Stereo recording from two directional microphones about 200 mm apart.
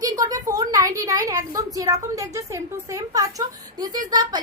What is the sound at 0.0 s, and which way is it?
A woman's voice, 20° right (ahead or behind).